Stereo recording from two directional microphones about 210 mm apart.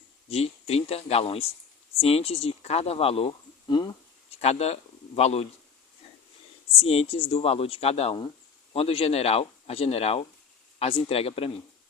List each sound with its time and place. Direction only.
0.3 s speech: 30° left (ahead or behind)
6.8 s speech: 30° left (ahead or behind)